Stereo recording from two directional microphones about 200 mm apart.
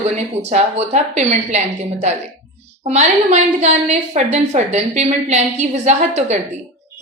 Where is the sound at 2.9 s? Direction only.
35° right (ahead or behind).